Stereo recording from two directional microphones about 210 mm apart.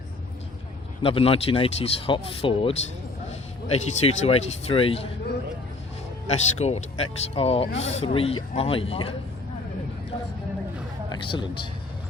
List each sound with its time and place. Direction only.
1.0 s speech: 25° left (ahead or behind)
6.3 s speech: 30° left (ahead or behind)
11.1 s speech: 20° left (ahead or behind)